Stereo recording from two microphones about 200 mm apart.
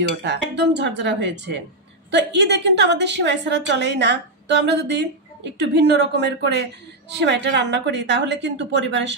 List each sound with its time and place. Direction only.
0.0 s a woman's voice: 60° right (ahead or behind)